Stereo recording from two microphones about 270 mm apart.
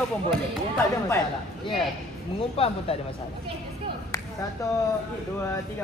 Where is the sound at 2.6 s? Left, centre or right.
Left.